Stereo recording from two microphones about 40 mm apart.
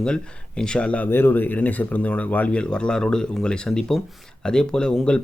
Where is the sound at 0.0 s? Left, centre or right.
Left.